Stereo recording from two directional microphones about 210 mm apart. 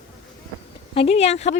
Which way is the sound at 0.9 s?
30° left (ahead or behind).